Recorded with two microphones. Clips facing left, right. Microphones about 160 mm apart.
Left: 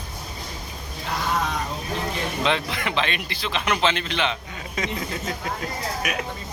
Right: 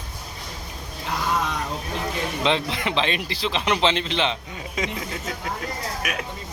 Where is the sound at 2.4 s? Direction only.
25° right (ahead or behind).